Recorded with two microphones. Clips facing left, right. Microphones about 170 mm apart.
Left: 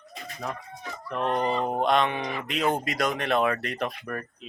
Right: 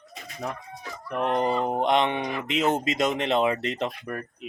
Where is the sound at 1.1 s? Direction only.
15° right (ahead or behind).